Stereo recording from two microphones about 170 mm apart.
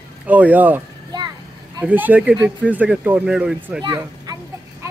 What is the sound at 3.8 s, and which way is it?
Speech, 25° right (ahead or behind).